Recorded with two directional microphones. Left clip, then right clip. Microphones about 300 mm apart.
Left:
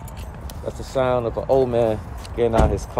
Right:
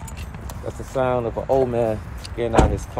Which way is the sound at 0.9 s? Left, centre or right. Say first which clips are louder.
Left 1 dB; centre.